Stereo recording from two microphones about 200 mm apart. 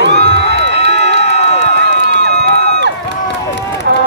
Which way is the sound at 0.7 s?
30° left (ahead or behind).